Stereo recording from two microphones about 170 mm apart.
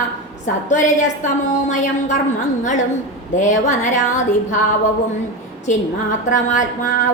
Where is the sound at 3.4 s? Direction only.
45° left (ahead or behind).